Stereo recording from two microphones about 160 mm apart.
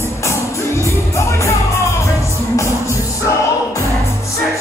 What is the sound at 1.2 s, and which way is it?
Music, 15° left (ahead or behind).